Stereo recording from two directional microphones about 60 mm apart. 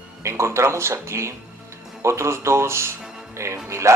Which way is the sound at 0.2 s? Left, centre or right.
Right.